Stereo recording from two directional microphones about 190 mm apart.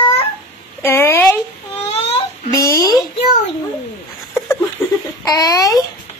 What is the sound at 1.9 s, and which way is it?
Baby cry, 30° left (ahead or behind).